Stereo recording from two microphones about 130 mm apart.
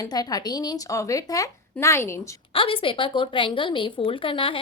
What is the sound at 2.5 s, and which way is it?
A woman's voice, 45° left (ahead or behind).